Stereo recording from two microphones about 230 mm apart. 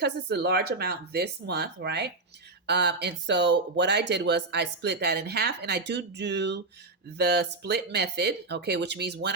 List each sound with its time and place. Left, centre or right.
0.0 s speech: right